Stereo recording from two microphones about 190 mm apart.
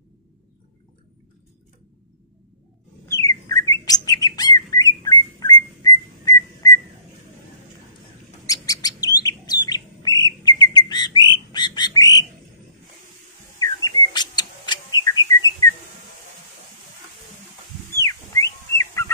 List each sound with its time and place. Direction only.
3.1 s bird: 20° left (ahead or behind)
8.5 s bird: 20° left (ahead or behind)
13.8 s bird: 20° left (ahead or behind)
17.9 s whistle: 15° left (ahead or behind)